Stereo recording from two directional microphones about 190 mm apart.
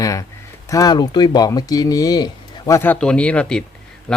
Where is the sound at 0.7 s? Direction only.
20° left (ahead or behind).